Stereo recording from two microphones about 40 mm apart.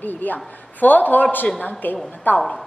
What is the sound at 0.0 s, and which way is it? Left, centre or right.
A woman's voice, left.